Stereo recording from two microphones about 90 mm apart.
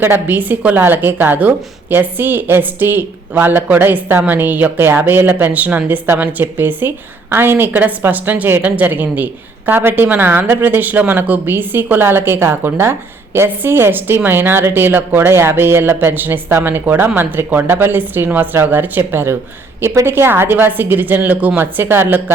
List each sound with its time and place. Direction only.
0.0 s speech: 20° right (ahead or behind)